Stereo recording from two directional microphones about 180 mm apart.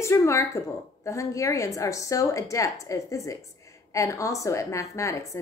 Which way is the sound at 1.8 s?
15° left (ahead or behind).